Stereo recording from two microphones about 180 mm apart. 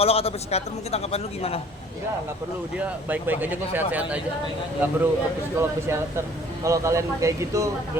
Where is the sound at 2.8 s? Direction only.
10° right (ahead or behind).